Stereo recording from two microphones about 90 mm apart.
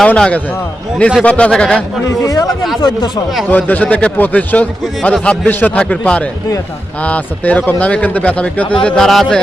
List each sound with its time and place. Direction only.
0.1 s a man's voice: 15° left (ahead or behind)
2.2 s speech: 40° left (ahead or behind)
3.5 s a man's voice: 20° left (ahead or behind)